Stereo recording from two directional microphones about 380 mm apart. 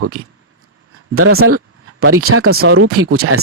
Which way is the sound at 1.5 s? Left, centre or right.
Right.